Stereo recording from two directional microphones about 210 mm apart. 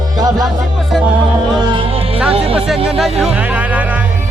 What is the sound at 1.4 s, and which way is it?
Music, 20° right (ahead or behind).